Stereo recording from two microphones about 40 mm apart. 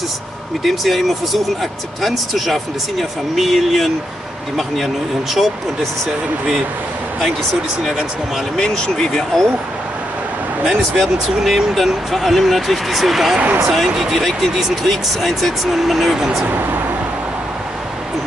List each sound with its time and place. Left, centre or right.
0.7 s speech: centre
8.5 s speech: centre
10.7 s speech: centre
16.4 s speech: right